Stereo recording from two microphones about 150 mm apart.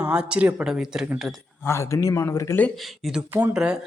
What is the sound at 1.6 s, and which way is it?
Speech, 20° left (ahead or behind).